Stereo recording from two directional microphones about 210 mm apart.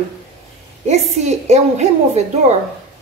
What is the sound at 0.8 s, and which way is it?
A woman's voice, 30° right (ahead or behind).